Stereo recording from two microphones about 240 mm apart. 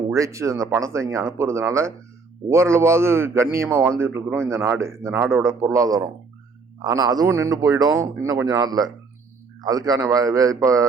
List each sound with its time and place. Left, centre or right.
0.1 s a man's voice: centre